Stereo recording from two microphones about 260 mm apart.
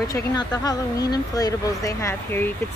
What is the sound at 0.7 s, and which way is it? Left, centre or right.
Speech, centre.